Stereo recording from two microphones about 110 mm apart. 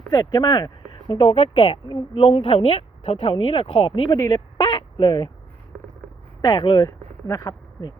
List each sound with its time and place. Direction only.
0.1 s speech: 30° left (ahead or behind); by 4.2 s 50° left (ahead or behind)
4.3 s speech: 40° left (ahead or behind)
6.4 s speech: 45° left (ahead or behind)
6.8 s speech: 30° left (ahead or behind)